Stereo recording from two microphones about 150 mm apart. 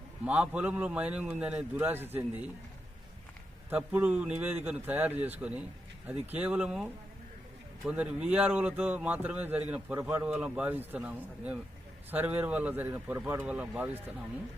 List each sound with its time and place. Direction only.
0.3 s speech: 10° right (ahead or behind)
3.7 s speech: 10° right (ahead or behind)